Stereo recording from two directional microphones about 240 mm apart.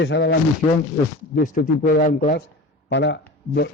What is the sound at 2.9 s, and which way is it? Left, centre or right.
Speech, left.